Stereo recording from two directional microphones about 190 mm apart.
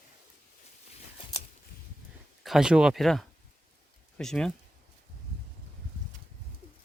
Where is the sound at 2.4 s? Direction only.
Centre (ahead or behind).